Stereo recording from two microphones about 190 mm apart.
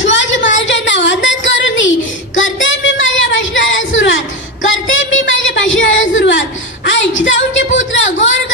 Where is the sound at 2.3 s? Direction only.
90° left.